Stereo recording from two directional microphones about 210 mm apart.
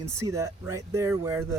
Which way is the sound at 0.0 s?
15° right (ahead or behind).